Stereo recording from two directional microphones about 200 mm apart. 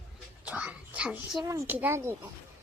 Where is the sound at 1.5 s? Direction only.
10° right (ahead or behind).